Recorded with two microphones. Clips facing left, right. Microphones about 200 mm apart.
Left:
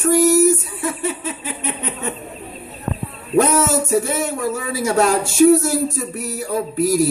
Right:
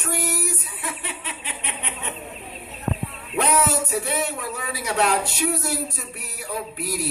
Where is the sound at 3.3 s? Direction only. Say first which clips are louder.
Left 6 dB; 45° left (ahead or behind).